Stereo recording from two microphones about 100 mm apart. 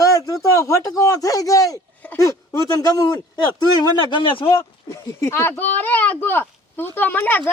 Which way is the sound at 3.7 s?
55° left (ahead or behind).